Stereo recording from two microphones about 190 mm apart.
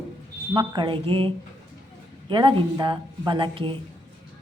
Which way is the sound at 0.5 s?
20° right (ahead or behind).